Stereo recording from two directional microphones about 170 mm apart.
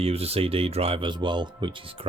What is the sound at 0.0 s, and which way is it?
Speech, 35° right (ahead or behind).